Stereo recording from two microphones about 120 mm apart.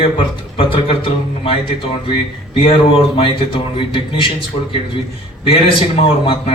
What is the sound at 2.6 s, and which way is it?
A man's voice, 50° left (ahead or behind).